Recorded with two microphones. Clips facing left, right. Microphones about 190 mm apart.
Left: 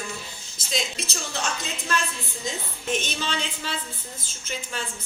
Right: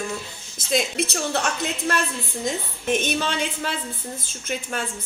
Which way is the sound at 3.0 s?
55° right (ahead or behind).